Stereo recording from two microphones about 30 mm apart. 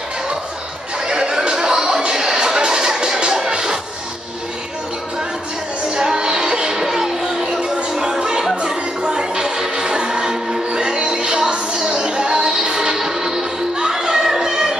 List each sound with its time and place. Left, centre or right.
1.0 s chatter: right
5.9 s music: right